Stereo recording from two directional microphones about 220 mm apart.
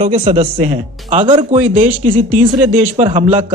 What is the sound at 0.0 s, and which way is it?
Speech, 30° right (ahead or behind).